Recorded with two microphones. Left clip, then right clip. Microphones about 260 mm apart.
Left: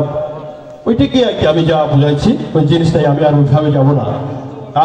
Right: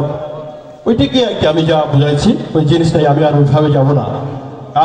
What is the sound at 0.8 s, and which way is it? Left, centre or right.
A man's voice, right.